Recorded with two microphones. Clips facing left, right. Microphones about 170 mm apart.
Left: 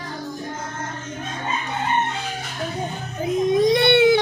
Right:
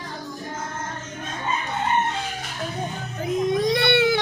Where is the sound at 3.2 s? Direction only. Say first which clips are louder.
Left 4 dB; 20° left (ahead or behind).